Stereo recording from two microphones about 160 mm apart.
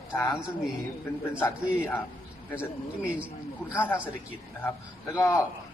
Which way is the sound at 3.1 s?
10° right (ahead or behind).